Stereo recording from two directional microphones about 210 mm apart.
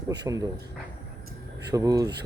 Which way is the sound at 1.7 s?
15° right (ahead or behind).